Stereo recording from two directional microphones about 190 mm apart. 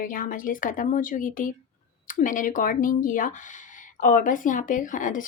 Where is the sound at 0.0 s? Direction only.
45° left (ahead or behind).